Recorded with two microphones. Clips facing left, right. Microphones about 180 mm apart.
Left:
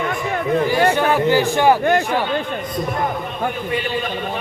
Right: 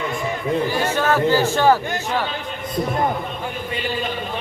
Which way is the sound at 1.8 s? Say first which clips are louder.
Left 10 dB; 60° left (ahead or behind).